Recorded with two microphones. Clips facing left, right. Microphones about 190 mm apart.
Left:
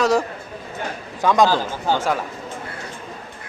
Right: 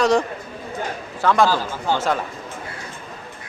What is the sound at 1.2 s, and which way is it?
A man's voice, 15° left (ahead or behind).